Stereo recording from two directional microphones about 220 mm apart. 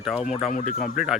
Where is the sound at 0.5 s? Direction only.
35° left (ahead or behind).